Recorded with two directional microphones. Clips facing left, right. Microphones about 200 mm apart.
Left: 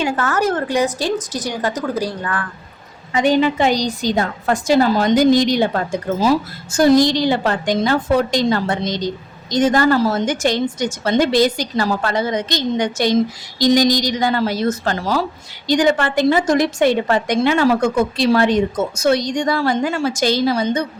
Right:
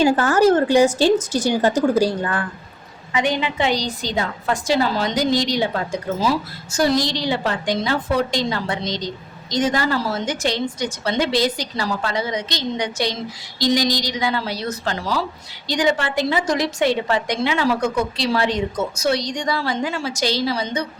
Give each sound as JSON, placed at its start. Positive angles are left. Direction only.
{"t": 0.0, "sound": "a woman's voice", "side_deg": -30}
{"t": 3.1, "sound": "a woman's voice", "side_deg": 40}